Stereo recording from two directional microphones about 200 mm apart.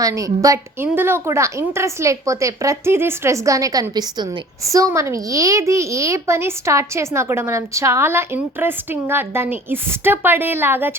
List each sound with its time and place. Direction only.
0.0 s a woman's voice: 15° right (ahead or behind)